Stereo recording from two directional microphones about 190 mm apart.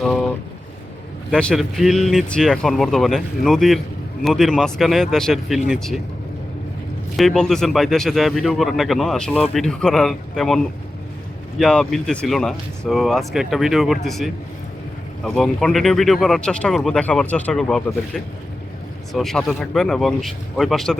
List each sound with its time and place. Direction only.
0.0 s boat: 5° left (ahead or behind)
1.3 s speech: 5° left (ahead or behind)
7.2 s speech: centre (ahead or behind)